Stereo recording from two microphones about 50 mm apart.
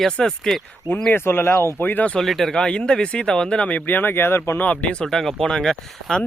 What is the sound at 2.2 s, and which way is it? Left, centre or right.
Speech, centre.